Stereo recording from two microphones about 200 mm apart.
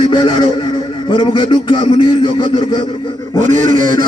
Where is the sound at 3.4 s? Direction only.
40° right (ahead or behind).